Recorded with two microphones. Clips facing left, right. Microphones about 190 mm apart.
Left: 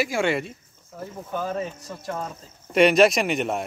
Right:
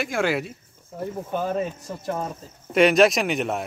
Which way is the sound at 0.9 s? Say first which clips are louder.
Right 4 dB; 20° right (ahead or behind).